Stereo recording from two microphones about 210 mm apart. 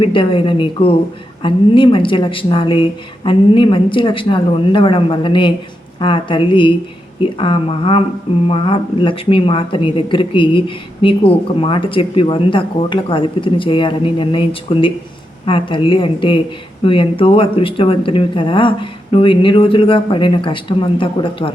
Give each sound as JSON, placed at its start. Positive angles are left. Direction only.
{"t": 0.0, "sound": "a woman's voice", "side_deg": 25}